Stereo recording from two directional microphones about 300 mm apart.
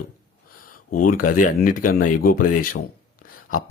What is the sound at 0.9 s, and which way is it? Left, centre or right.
Speech, left.